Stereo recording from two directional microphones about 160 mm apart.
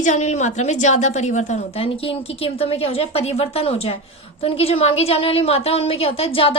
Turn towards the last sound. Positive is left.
turn(degrees=35)  # may be behind; listen again after turning